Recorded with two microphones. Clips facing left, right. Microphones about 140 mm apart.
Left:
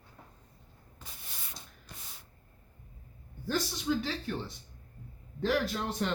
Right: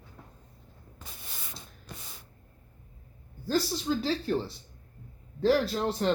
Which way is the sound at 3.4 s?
35° right (ahead or behind).